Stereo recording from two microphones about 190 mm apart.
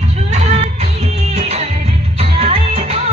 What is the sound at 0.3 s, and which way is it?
Music, 35° right (ahead or behind).